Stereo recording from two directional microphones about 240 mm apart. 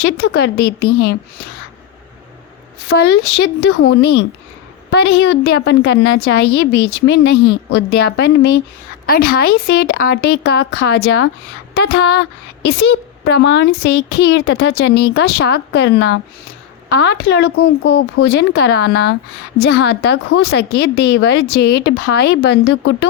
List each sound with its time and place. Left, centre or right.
0.0 s a woman's voice: left
2.9 s a woman's voice: left